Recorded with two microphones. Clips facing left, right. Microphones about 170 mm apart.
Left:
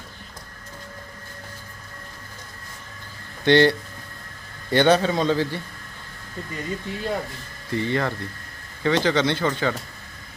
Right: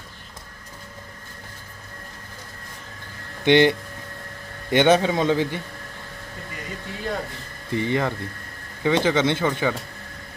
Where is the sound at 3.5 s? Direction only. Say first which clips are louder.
Even; 15° right (ahead or behind).